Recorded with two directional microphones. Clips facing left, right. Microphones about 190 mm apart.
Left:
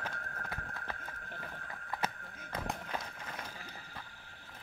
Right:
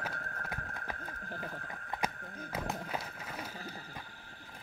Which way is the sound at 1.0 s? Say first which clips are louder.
Right 4 dB; 35° right (ahead or behind).